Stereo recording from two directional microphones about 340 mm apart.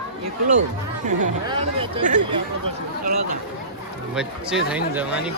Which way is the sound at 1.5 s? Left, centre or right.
Centre.